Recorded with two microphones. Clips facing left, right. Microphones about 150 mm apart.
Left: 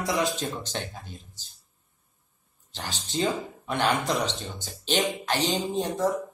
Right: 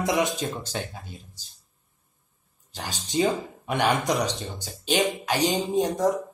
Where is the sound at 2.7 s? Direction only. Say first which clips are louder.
Right 3 dB; 10° right (ahead or behind).